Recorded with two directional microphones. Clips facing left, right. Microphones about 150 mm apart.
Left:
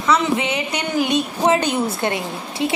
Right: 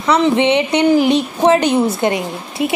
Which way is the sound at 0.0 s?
30° right (ahead or behind).